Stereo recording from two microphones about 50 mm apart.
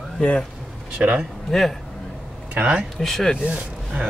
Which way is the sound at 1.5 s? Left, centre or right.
Centre.